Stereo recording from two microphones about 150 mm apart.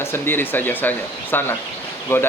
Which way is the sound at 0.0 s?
15° left (ahead or behind).